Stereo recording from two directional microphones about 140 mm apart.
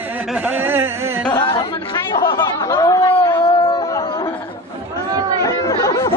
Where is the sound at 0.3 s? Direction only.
15° right (ahead or behind).